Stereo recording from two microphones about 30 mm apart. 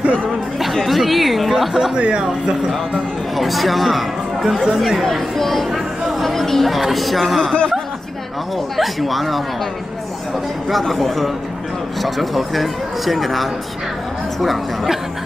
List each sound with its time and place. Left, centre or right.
0.8 s a man's voice: centre
2.0 s speech: right
2.4 s speech: centre
3.3 s a man's voice: centre
6.2 s chatter: centre
6.8 s a man's voice: centre
8.7 s a man's voice: centre
10.7 s a man's voice: centre